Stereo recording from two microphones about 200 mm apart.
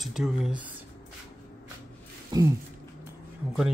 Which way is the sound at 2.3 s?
20° right (ahead or behind).